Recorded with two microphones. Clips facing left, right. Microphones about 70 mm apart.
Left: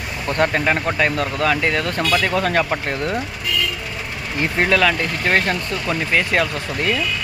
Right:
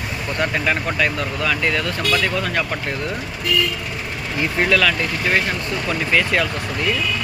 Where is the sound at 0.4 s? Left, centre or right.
Left.